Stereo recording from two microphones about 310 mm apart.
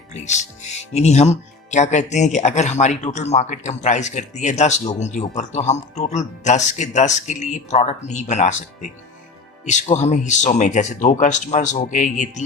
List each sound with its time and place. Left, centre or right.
0.1 s speech: left